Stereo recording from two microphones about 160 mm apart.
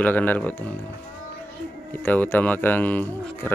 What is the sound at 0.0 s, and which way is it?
Speech, 10° left (ahead or behind).